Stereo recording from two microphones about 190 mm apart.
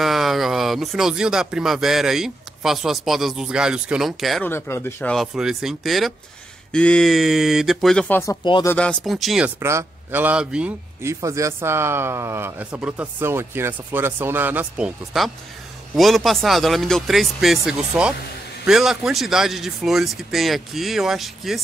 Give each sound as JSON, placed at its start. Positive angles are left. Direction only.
{"t": 0.0, "sound": "speech", "side_deg": 0}
{"t": 4.5, "sound": "speech", "side_deg": 10}
{"t": 5.1, "sound": "speech", "side_deg": 0}
{"t": 8.3, "sound": "speech", "side_deg": 25}
{"t": 8.6, "sound": "speech", "side_deg": 5}
{"t": 9.6, "sound": "a man's voice", "side_deg": -15}